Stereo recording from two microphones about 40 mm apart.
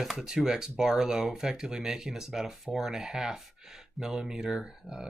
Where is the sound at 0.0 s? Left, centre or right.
Centre.